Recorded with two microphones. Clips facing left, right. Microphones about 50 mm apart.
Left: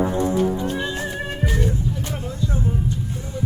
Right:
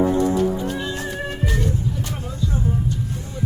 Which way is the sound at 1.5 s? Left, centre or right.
Centre.